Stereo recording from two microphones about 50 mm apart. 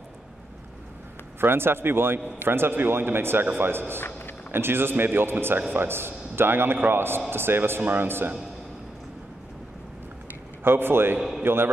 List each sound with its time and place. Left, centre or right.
1.4 s a man's voice: right
2.1 s a man's voice: right
2.5 s a man's voice: right
4.0 s a sound: left
4.5 s a man's voice: right
7.8 s a man's voice: right
10.6 s a man's voice: right
11.1 s a sound: centre
11.4 s a man's voice: right